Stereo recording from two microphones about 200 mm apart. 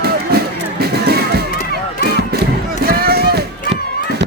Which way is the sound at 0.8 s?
50° right (ahead or behind).